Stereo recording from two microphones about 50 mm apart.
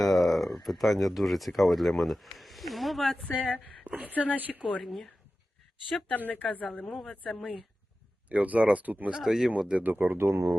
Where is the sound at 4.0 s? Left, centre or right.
Right.